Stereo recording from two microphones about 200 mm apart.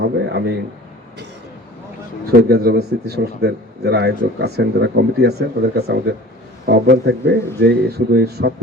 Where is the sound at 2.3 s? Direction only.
55° right (ahead or behind).